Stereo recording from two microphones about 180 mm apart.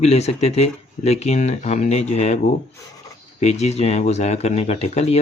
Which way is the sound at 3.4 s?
35° left (ahead or behind).